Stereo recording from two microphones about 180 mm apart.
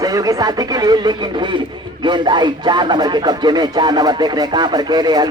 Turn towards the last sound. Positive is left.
turn(degrees=-25)  # may be behind; listen again after turning